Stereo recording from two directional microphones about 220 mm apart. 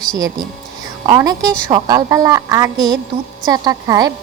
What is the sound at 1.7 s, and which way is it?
Speech, 15° right (ahead or behind).